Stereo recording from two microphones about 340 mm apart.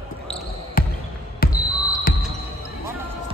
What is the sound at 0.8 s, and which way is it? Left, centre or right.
Basketball bounce, left.